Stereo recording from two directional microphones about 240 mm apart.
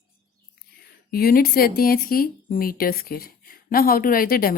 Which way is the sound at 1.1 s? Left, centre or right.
Left.